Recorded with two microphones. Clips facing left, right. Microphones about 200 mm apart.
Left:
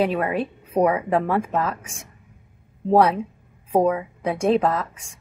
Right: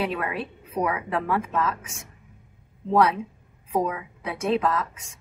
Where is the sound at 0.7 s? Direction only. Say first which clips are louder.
Left 7 dB; 35° left (ahead or behind).